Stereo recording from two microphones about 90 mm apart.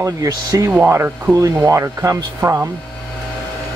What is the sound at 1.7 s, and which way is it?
Speech, 35° right (ahead or behind).